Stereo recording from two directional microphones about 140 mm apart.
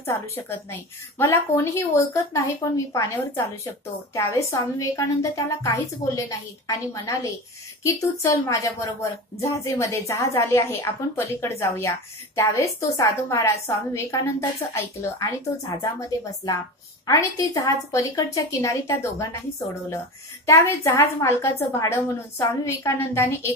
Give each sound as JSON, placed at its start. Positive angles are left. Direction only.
{"t": 0.0, "sound": "a woman's voice", "side_deg": 20}
{"t": 20.4, "sound": "a woman's voice", "side_deg": 20}